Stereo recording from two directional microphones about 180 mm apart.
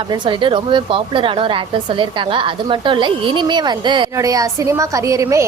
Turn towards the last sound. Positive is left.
turn(degrees=-15)  # may be behind; listen again after turning